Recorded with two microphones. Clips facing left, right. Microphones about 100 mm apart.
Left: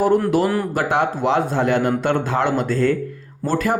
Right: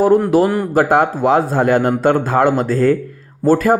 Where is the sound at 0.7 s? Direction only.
45° right (ahead or behind).